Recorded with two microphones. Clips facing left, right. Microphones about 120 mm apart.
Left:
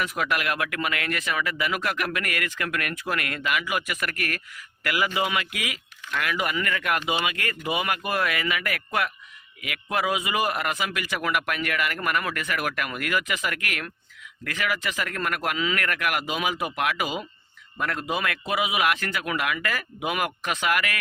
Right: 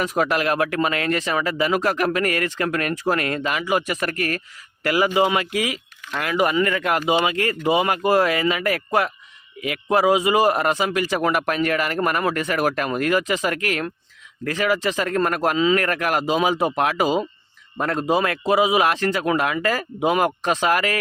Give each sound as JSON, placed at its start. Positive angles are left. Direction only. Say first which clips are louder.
{"t": 0.0, "sound": "speech", "louder": "right 6 dB", "side_deg": -30}